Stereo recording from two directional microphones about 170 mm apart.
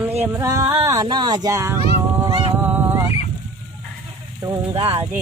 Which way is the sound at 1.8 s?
30° right (ahead or behind).